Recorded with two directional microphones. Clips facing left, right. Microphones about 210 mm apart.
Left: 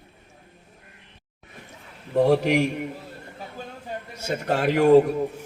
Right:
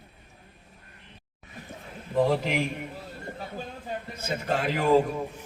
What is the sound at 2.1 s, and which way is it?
Speech, 70° left (ahead or behind).